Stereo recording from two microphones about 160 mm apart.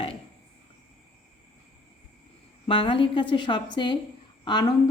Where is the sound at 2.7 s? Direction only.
35° left (ahead or behind).